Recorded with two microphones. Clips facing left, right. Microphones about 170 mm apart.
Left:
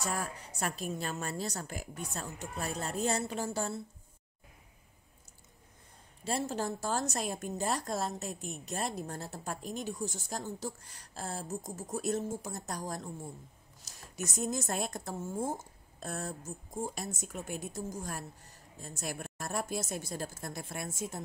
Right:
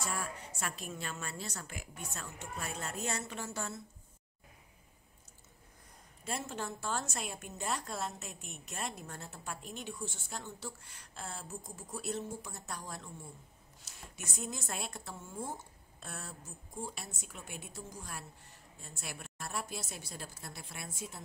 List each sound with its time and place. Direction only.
0.0 s a woman's voice: 40° left (ahead or behind)
6.2 s a woman's voice: 35° left (ahead or behind)